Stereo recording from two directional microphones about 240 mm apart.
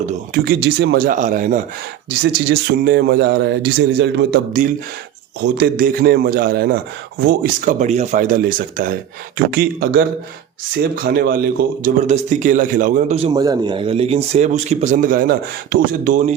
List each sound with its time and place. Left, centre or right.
0.4 s speech: right
2.0 s a man's voice: right